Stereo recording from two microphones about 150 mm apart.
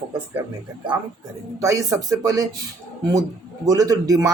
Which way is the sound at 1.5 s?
20° right (ahead or behind).